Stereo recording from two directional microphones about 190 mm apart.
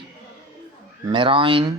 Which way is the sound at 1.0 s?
25° right (ahead or behind).